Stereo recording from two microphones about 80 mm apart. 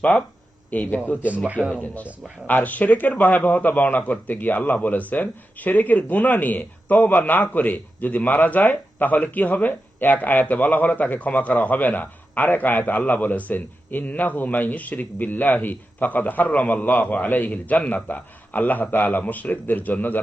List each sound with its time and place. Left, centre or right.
0.7 s a man's voice: centre
1.5 s a man's voice: centre
1.7 s a man's voice: centre